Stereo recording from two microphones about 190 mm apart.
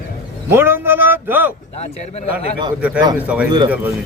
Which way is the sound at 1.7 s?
35° left (ahead or behind).